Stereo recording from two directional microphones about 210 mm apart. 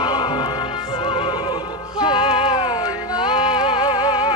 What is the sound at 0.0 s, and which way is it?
Music, 20° left (ahead or behind).